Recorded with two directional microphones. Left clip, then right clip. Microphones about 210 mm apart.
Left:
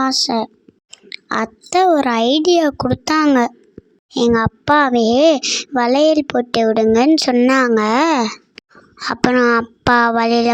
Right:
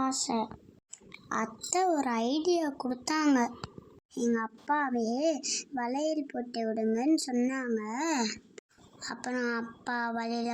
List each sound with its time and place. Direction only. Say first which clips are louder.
0.0 s speech: left 14 dB; 55° left (ahead or behind)
1.3 s a child's voice: left 14 dB; 45° left (ahead or behind)